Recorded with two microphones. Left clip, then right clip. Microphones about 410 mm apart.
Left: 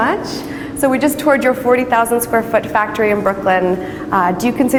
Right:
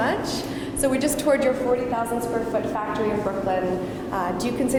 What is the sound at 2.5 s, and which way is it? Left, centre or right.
Speech, left.